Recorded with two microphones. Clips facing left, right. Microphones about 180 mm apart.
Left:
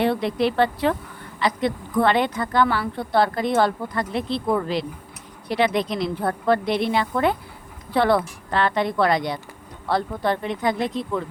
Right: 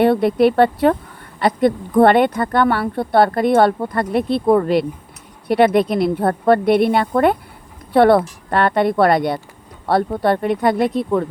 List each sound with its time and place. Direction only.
0.0 s a woman's voice: 55° right (ahead or behind)